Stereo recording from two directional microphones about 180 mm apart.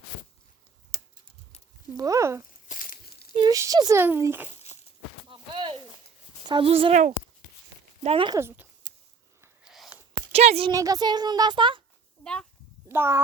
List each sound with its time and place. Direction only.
2.0 s speech: 15° right (ahead or behind)
2.6 s a sound: 50° left (ahead or behind)
3.3 s speech: 20° right (ahead or behind)
4.4 s a sound: 35° left (ahead or behind)
5.3 s a sound: 30° right (ahead or behind)
6.5 s speech: 30° right (ahead or behind)
8.0 s speech: 30° right (ahead or behind)
8.4 s speech: 15° right (ahead or behind)
9.6 s a sound: centre (ahead or behind)
10.3 s speech: 35° right (ahead or behind)
10.7 s speech: 20° right (ahead or behind)
12.2 s speech: 5° left (ahead or behind)
12.9 s a child's voice: 15° right (ahead or behind)